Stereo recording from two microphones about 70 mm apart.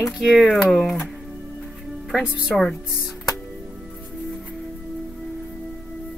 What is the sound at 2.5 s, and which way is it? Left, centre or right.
Speech, centre.